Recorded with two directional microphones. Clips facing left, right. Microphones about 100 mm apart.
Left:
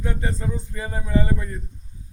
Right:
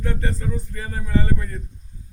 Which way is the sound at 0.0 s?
15° left (ahead or behind).